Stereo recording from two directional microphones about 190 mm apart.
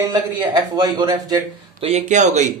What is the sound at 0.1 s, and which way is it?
Speech, 20° right (ahead or behind).